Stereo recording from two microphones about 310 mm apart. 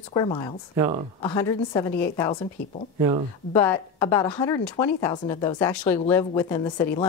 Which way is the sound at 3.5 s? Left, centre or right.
Centre.